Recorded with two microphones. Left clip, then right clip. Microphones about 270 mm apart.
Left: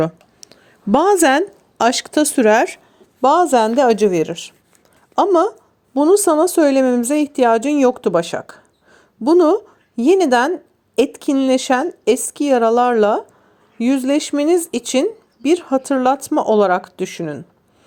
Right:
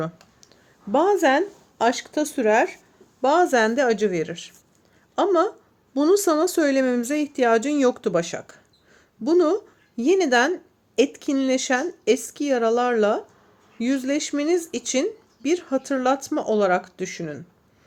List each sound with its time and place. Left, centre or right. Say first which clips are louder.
0.3 s speech: left 9 dB; left
5.9 s speech: left 6 dB; centre